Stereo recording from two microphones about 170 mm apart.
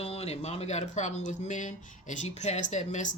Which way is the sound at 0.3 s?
40° left (ahead or behind).